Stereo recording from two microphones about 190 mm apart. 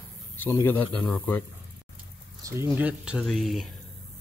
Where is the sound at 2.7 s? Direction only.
10° right (ahead or behind).